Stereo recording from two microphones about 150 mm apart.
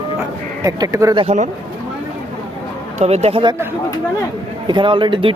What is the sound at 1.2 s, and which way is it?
Speech, 50° right (ahead or behind).